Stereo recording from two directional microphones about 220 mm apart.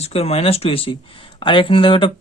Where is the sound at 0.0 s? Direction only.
30° left (ahead or behind).